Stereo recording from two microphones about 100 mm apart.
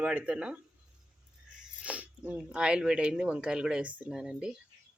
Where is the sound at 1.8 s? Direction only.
15° right (ahead or behind).